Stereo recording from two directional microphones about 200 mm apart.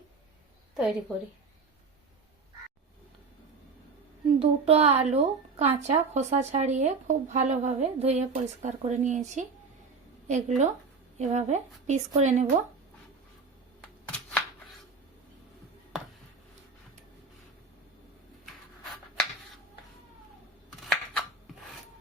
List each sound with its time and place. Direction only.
0.7 s a woman's voice: centre (ahead or behind)
4.4 s a woman's voice: 30° right (ahead or behind)
20.9 s scissors: centre (ahead or behind)